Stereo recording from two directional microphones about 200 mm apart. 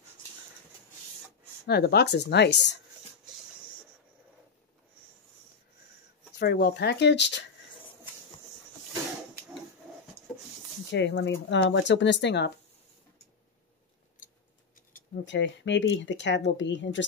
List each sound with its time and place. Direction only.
1.7 s speech: 55° left (ahead or behind)
6.4 s speech: 50° left (ahead or behind)
10.9 s speech: 60° left (ahead or behind)
15.2 s speech: 65° left (ahead or behind)